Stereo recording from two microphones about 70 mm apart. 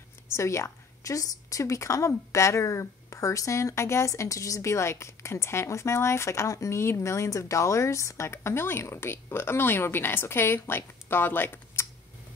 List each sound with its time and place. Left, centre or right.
0.3 s a woman's voice: left